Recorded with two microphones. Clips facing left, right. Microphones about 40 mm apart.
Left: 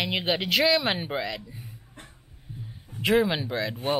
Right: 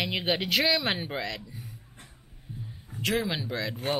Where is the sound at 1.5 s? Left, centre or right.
Centre.